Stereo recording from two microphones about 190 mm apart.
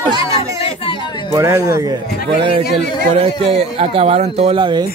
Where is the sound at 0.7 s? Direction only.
25° left (ahead or behind).